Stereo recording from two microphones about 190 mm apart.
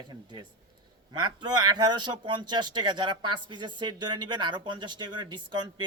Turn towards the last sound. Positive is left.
turn(degrees=-25)  # may be behind; listen again after turning